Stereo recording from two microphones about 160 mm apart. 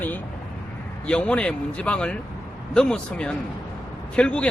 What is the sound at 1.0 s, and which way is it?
A man's voice, 5° left (ahead or behind).